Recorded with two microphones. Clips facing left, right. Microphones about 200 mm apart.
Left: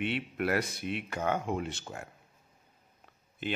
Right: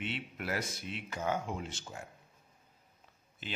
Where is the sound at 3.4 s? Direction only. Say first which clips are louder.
Left 8 dB; 60° left (ahead or behind).